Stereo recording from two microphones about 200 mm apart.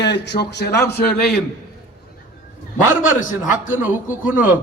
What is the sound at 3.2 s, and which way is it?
Speech, 40° left (ahead or behind).